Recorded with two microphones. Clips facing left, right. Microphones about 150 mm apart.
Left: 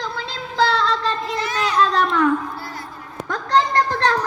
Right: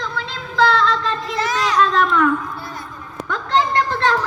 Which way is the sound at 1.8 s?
35° left (ahead or behind).